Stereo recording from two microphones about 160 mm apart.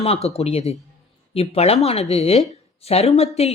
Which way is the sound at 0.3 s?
40° left (ahead or behind).